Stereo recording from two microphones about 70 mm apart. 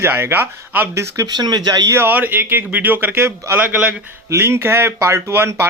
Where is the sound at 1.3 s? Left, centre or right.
Right.